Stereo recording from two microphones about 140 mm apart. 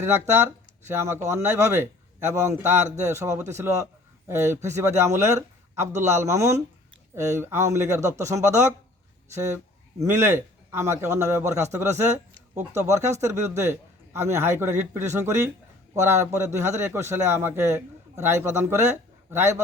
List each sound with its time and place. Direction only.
0.0 s a man's voice: 20° right (ahead or behind)